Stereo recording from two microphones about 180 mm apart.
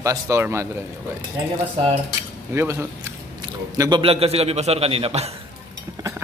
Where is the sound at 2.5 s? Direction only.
15° right (ahead or behind).